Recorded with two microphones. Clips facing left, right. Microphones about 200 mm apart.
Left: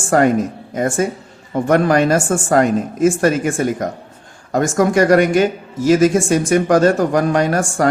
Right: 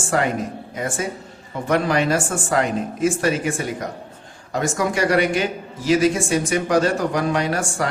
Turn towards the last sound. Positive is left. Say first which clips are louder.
# left 6 dB
turn(degrees=45)  # may be behind; listen again after turning